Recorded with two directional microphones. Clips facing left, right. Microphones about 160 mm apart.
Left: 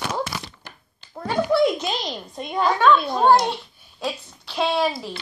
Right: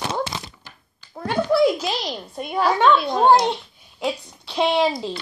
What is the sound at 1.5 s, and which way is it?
A child's voice, centre (ahead or behind).